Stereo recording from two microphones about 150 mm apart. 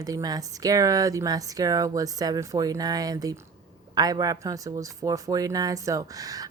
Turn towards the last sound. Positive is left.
turn(degrees=-25)  # may be behind; listen again after turning